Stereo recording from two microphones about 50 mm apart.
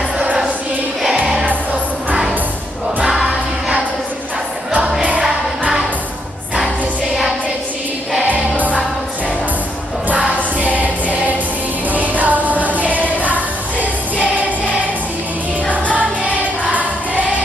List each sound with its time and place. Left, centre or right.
1.2 s music: centre
3.2 s music: right
8.2 s music: right
10.1 s music: right
11.9 s music: right
16.0 s music: right